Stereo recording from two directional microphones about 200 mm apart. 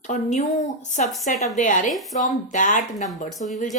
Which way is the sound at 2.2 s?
40° left (ahead or behind).